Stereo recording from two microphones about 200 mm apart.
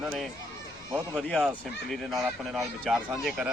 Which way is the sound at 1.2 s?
Centre (ahead or behind).